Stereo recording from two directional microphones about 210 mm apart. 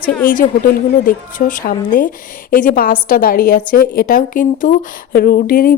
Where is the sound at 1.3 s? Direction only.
40° left (ahead or behind).